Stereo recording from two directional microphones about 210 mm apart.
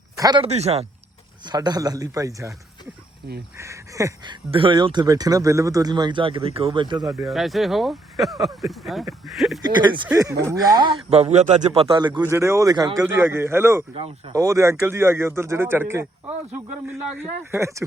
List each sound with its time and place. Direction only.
0.2 s speech: 20° right (ahead or behind)
1.5 s speech: 20° right (ahead or behind)
3.6 s speech: 15° right (ahead or behind)
7.3 s speech: centre (ahead or behind)
9.6 s speech: 20° right (ahead or behind)
13.9 s speech: 25° right (ahead or behind)
14.3 s speech: 15° right (ahead or behind)